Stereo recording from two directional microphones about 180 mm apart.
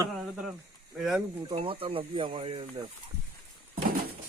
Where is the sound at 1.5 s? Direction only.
30° right (ahead or behind).